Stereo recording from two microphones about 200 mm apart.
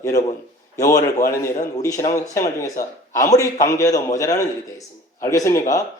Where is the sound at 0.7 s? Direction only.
15° left (ahead or behind).